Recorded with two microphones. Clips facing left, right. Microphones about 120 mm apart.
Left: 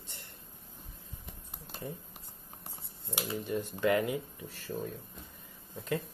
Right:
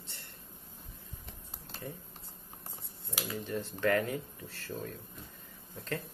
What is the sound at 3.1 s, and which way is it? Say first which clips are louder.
Speech: left 2 dB; 20° left (ahead or behind).